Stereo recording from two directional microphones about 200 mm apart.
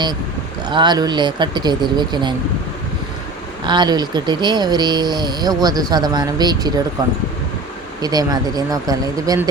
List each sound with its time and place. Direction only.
0.7 s speech: 20° right (ahead or behind)
3.6 s speech: 20° right (ahead or behind)
8.0 s speech: 20° right (ahead or behind)